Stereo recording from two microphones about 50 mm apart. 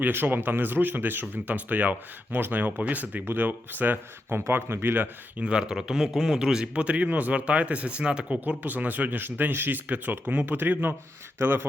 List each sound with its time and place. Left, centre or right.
0.1 s speech: right
5.4 s a man's voice: centre
6.7 s speech: right
8.3 s speech: right